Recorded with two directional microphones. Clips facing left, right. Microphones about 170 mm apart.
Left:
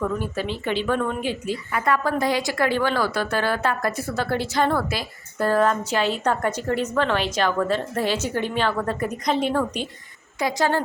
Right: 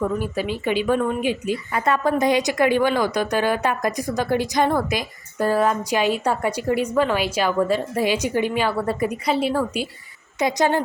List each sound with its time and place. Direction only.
0.0 s a woman's voice: 10° right (ahead or behind)
10.4 s a woman's voice: 20° right (ahead or behind)